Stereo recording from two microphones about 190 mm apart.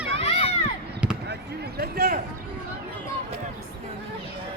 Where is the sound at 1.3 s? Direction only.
55° right (ahead or behind).